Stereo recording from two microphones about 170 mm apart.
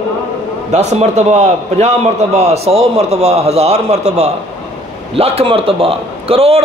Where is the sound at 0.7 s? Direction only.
40° right (ahead or behind).